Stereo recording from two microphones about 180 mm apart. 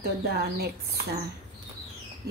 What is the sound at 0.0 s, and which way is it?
Speech, 65° right (ahead or behind).